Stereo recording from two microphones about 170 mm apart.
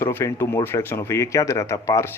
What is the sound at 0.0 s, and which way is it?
Speech, 15° left (ahead or behind).